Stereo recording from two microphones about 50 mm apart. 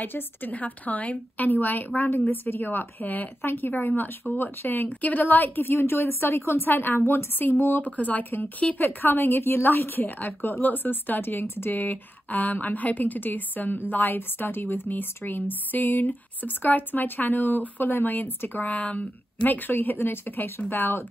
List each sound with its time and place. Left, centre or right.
0.0 s a woman's voice: left
7.8 s a woman's voice: left
18.6 s a woman's voice: left